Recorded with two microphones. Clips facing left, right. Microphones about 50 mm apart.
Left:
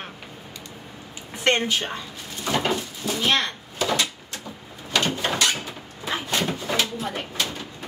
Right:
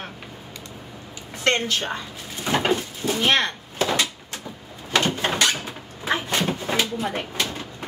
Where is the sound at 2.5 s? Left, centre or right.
Right.